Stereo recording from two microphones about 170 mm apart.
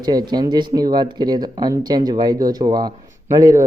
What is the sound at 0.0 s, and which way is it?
Speech, 25° right (ahead or behind).